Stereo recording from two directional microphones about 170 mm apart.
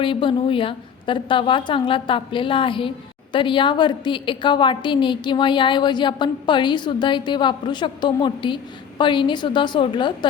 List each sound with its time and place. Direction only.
0.0 s a woman's voice: 30° left (ahead or behind)